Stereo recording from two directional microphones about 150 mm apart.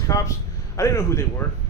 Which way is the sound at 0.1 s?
25° left (ahead or behind).